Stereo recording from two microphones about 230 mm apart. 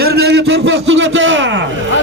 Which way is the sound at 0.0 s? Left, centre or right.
Right.